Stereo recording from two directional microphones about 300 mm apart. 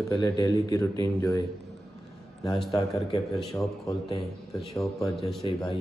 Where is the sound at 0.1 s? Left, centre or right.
Centre.